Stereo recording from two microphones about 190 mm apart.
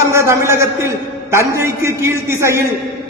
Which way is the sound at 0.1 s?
15° right (ahead or behind).